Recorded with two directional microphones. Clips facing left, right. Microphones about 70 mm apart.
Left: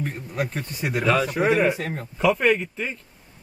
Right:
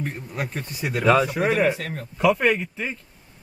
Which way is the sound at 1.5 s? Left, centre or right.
Centre.